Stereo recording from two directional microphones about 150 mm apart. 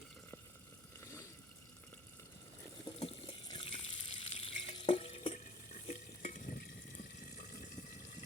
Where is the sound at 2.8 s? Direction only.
30° left (ahead or behind); by 7.4 s 65° left (ahead or behind).